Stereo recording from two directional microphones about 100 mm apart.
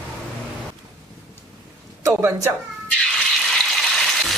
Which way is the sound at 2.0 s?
30° right (ahead or behind).